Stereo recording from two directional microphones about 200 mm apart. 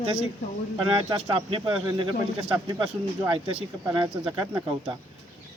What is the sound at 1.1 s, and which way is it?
Speech, 25° right (ahead or behind).